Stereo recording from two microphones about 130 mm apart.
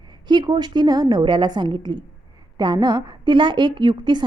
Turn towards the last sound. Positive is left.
turn(degrees=-35)  # may be behind; listen again after turning